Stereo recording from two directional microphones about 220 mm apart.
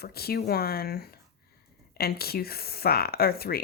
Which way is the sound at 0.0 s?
45° left (ahead or behind).